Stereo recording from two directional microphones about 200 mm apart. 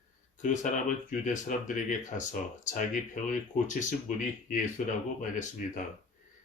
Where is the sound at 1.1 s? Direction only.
40° left (ahead or behind).